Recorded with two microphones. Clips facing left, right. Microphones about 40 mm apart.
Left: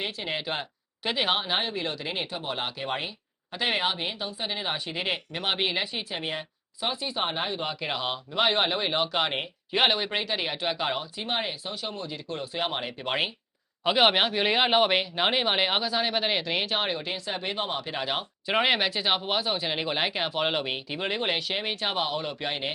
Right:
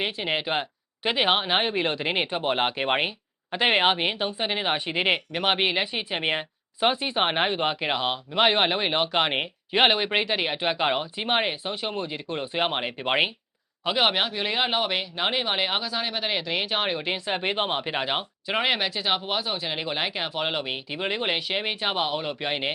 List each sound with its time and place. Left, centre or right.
0.0 s speech: right
6.1 s speech: right
7.9 s speech: centre
13.8 s speech: centre
16.6 s speech: centre
17.1 s speech: right
18.4 s speech: centre